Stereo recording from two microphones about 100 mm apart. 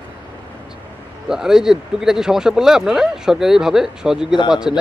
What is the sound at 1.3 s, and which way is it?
Speech, 5° right (ahead or behind).